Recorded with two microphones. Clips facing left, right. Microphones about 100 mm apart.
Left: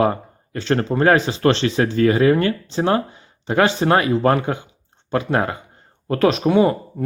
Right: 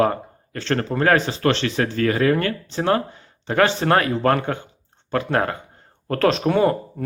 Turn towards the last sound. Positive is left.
turn(degrees=10)  # may be behind; listen again after turning